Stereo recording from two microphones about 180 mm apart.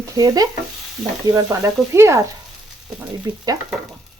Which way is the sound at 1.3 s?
15° right (ahead or behind).